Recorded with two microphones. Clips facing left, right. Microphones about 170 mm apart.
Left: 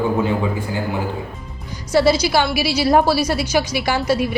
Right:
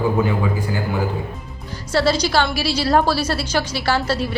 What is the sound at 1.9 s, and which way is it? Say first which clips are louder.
A woman's voice: left 3 dB; 10° left (ahead or behind).